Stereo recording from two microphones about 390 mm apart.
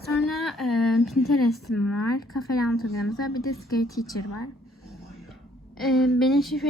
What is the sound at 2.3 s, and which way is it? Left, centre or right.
A woman's voice, centre.